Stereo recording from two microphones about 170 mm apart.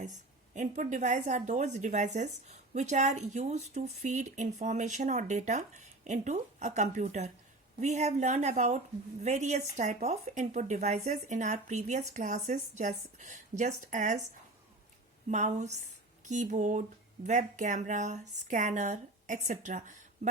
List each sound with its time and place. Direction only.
0.5 s a woman's voice: 45° right (ahead or behind)
15.3 s a woman's voice: 45° right (ahead or behind)